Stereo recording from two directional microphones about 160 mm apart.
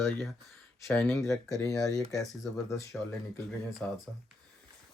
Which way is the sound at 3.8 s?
5° left (ahead or behind).